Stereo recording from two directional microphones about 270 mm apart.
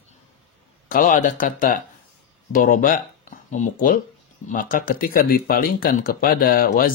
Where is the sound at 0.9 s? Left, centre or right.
Left.